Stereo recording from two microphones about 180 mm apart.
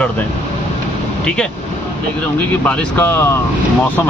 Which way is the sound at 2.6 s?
10° left (ahead or behind).